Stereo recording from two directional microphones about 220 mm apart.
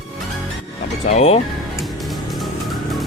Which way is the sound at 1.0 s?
30° left (ahead or behind).